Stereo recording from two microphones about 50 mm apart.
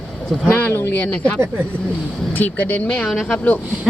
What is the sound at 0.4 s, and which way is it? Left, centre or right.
Speech, left.